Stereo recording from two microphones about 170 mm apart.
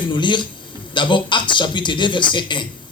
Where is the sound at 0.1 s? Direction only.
25° left (ahead or behind).